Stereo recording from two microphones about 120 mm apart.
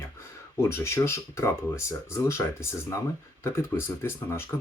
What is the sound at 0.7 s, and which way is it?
Speech, 20° left (ahead or behind).